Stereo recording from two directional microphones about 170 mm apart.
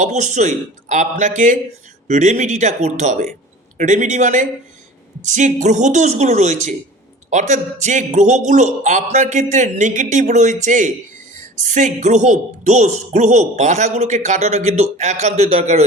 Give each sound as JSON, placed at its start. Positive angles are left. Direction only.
{"t": 0.0, "sound": "a man's voice", "side_deg": -45}
{"t": 2.0, "sound": "a man's voice", "side_deg": -45}